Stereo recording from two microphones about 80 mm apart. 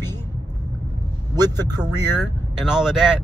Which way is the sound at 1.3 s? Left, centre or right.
Right.